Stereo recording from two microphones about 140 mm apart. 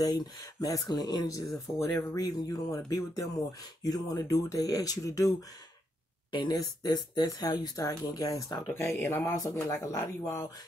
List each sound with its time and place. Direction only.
0.0 s speech: 25° left (ahead or behind)
6.3 s speech: 30° left (ahead or behind)